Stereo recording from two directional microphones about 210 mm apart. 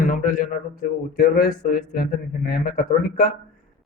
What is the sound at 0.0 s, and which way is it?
Speech, 40° left (ahead or behind).